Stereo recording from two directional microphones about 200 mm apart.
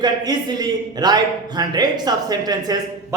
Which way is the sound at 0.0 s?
20° right (ahead or behind).